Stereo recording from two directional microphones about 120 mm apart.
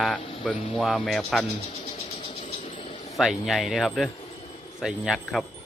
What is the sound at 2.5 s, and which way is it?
Vehicle, 70° left (ahead or behind).